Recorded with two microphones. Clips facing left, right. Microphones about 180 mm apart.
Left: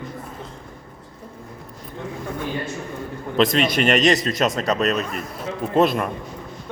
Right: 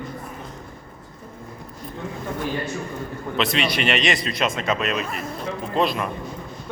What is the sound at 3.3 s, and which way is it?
A man's voice, 45° left (ahead or behind).